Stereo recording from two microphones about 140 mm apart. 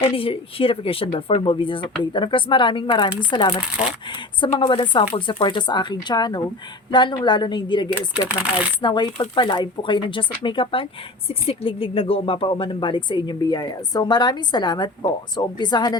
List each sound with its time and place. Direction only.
0.2 s speech: 40° left (ahead or behind)